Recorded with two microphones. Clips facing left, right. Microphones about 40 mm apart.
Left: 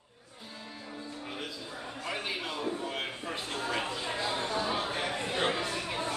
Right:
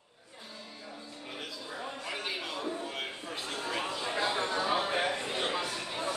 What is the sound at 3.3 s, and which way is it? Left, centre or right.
Speech, centre.